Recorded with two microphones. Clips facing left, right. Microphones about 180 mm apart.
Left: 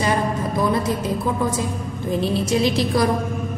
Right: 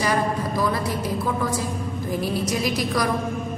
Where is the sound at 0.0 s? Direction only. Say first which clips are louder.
Left 2 dB; 25° left (ahead or behind).